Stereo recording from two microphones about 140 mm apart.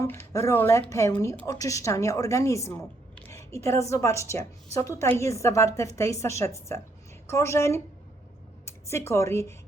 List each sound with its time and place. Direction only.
0.0 s a woman's voice: 20° left (ahead or behind)